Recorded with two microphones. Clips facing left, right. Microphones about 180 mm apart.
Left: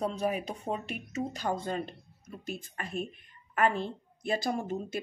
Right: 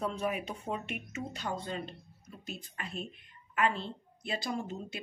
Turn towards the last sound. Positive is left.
turn(degrees=50)  # may be behind; listen again after turning